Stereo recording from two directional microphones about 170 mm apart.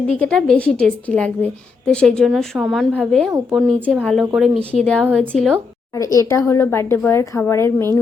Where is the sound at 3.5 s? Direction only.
10° right (ahead or behind).